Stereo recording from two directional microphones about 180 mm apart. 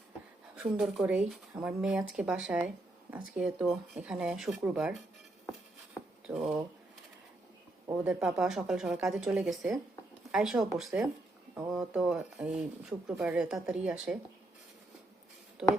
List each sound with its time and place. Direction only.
0.5 s speech: 5° right (ahead or behind)
5.5 s a sound: centre (ahead or behind)
8.0 s speech: 5° right (ahead or behind)
11.6 s speech: 20° right (ahead or behind)
11.9 s speech: 5° right (ahead or behind)